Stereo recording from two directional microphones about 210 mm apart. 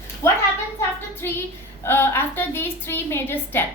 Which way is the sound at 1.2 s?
15° left (ahead or behind).